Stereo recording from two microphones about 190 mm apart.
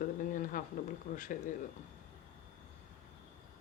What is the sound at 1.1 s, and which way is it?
Speech, 45° left (ahead or behind).